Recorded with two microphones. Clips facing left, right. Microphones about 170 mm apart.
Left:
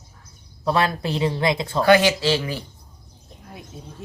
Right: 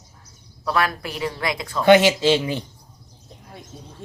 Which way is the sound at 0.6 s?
25° left (ahead or behind).